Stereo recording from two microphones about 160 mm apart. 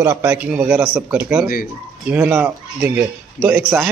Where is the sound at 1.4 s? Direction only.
65° left (ahead or behind).